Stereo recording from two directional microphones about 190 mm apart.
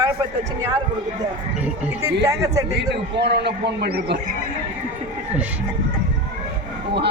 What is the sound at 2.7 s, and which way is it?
A man's voice, 60° right (ahead or behind).